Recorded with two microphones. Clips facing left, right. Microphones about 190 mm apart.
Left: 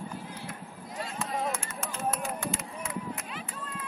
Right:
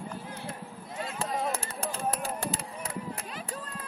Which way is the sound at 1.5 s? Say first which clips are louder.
Right 2 dB; 35° right (ahead or behind).